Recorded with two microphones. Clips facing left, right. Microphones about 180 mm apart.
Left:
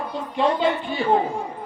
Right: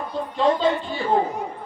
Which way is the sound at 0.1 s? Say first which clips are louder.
Right 2 dB; 15° left (ahead or behind).